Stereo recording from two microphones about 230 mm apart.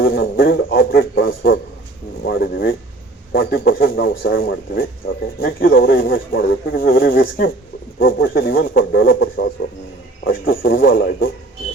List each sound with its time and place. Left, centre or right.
0.0 s speech: left
2.2 s speech: left